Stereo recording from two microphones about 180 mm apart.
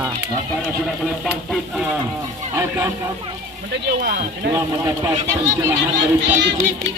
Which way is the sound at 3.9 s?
55° right (ahead or behind).